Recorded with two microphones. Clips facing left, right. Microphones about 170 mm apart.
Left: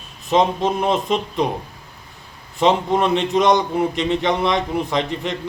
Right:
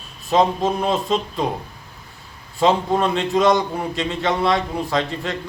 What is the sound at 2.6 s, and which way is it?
A man's voice, 20° left (ahead or behind).